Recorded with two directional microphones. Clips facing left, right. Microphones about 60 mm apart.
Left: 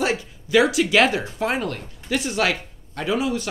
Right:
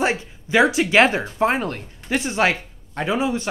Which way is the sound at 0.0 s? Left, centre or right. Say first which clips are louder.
Right 2 dB; right.